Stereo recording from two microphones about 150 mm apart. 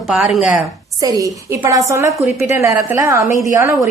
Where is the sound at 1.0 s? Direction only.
25° right (ahead or behind).